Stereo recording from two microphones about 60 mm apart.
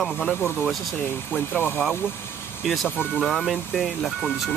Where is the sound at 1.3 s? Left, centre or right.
Left.